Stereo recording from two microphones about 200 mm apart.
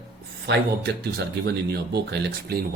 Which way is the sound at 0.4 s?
55° right (ahead or behind).